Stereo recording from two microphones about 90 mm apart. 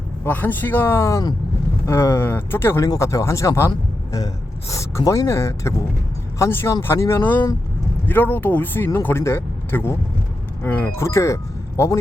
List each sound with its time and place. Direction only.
0.3 s speech: 20° left (ahead or behind)
2.8 s speech: 35° left (ahead or behind)
4.7 s speech: 35° left (ahead or behind)
10.9 s speech: 35° left (ahead or behind)